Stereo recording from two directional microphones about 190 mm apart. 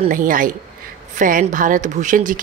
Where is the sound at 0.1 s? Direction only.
45° right (ahead or behind).